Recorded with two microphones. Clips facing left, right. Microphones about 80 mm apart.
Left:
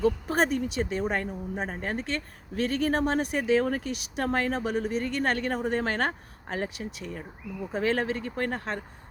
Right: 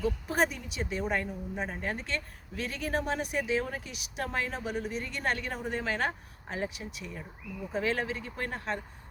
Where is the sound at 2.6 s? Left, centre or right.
Left.